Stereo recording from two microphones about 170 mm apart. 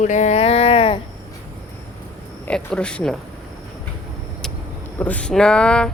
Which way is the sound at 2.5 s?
5° left (ahead or behind).